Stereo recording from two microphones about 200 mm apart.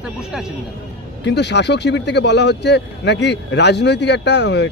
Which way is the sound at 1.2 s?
60° left (ahead or behind).